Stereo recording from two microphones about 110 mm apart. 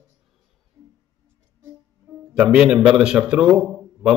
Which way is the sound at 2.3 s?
10° right (ahead or behind).